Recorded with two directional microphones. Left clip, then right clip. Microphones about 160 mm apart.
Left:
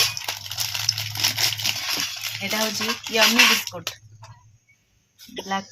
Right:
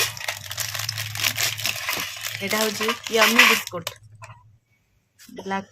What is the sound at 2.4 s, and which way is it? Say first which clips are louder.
Speech: right 2 dB; 20° right (ahead or behind).